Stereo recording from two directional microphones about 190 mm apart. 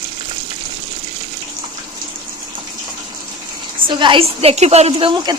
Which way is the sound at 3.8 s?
25° right (ahead or behind).